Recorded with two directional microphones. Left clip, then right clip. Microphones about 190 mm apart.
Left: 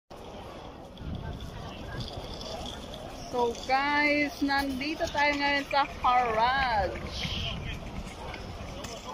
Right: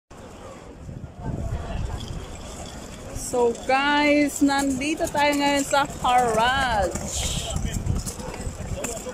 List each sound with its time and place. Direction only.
3.6 s speech: 15° right (ahead or behind)